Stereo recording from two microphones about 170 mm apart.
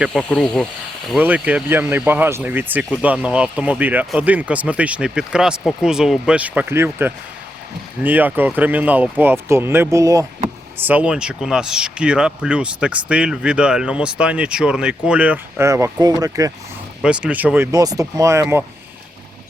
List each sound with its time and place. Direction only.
0.0 s speech: 5° left (ahead or behind)
1.1 s speech: 10° right (ahead or behind)
10.8 s speech: 10° right (ahead or behind)
17.0 s speech: 5° right (ahead or behind)